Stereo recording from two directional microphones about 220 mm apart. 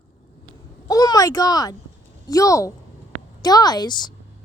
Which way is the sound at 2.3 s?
15° left (ahead or behind).